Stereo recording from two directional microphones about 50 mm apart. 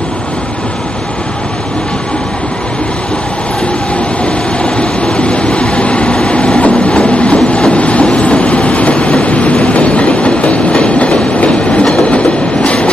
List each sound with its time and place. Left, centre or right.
4.7 s vehicle: left